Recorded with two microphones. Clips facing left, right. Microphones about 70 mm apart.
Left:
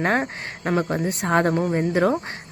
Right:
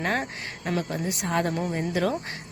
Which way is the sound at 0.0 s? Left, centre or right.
Left.